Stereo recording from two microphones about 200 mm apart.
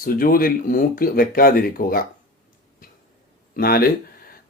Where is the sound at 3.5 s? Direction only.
50° left (ahead or behind).